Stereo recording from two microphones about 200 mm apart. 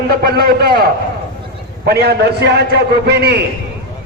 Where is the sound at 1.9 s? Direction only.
55° right (ahead or behind).